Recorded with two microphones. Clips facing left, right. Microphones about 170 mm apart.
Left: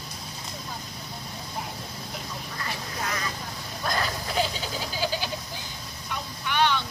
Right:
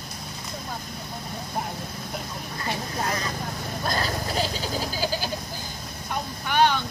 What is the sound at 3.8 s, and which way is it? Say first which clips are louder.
Goat: right 1 dB; 35° right (ahead or behind).